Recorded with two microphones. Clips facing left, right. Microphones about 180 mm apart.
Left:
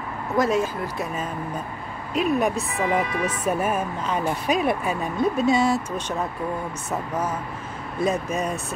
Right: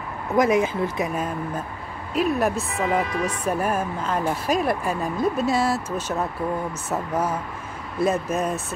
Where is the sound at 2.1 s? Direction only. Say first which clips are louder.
Even; centre (ahead or behind).